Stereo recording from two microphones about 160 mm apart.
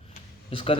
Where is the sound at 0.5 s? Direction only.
35° left (ahead or behind).